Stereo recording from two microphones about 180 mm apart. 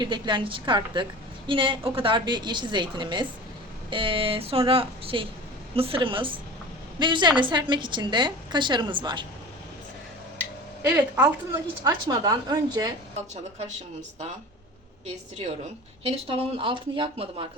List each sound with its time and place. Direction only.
0.0 s a woman's voice: 25° right (ahead or behind)
10.8 s a woman's voice: 10° right (ahead or behind)
11.8 s a woman's voice: 20° right (ahead or behind)
13.3 s speech: 40° right (ahead or behind)
16.0 s speech: 30° right (ahead or behind)